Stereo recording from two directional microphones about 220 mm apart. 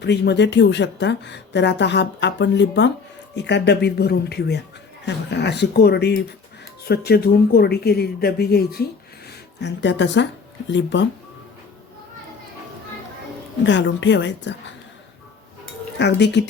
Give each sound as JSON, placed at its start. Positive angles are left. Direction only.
{"t": 0.0, "sound": "speech", "side_deg": 50}
{"t": 13.7, "sound": "speech", "side_deg": 55}
{"t": 16.0, "sound": "speech", "side_deg": 50}